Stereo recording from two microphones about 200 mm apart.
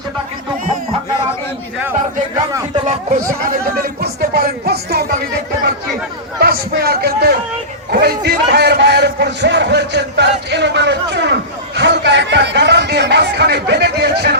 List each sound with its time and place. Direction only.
2.8 s speech: 40° right (ahead or behind)
3.8 s music: 50° right (ahead or behind)
6.4 s music: 50° right (ahead or behind)
7.9 s a man's voice: 55° right (ahead or behind)